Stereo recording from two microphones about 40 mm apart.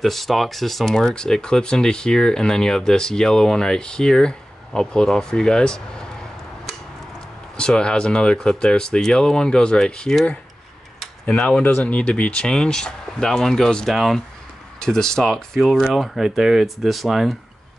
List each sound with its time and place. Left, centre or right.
0.0 s speech: centre
1.0 s speech: centre
7.5 s speech: left
11.2 s speech: left; by 13.7 s centre
13.8 s speech: centre
14.8 s speech: centre
15.8 s speech: centre